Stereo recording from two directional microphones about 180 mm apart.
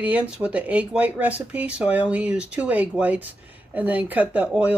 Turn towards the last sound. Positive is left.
turn(degrees=-10)  # may be behind; listen again after turning